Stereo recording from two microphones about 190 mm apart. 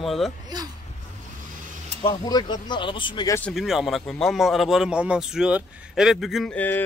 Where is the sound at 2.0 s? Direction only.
20° left (ahead or behind).